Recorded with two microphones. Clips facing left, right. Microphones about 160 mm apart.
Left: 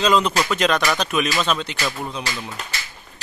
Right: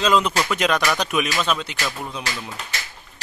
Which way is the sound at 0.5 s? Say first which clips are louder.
Even; 10° right (ahead or behind).